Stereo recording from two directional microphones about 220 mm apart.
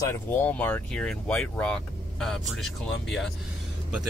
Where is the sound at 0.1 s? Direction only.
10° left (ahead or behind).